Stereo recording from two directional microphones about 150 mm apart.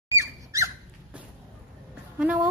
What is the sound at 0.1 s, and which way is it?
Squeak, 20° right (ahead or behind).